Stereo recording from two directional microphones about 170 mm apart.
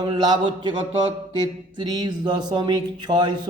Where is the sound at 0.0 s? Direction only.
30° right (ahead or behind).